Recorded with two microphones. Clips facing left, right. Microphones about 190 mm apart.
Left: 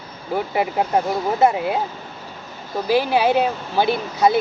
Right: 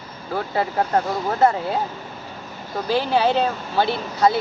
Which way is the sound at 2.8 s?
10° left (ahead or behind).